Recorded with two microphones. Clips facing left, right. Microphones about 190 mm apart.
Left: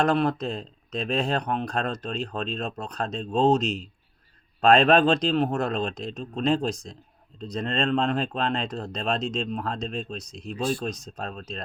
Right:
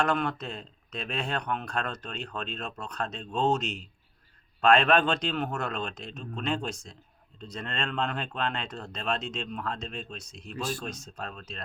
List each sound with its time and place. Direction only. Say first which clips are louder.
0.0 s speech: left 5 dB; 35° left (ahead or behind)